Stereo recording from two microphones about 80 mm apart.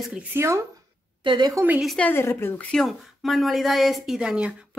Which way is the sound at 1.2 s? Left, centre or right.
Right.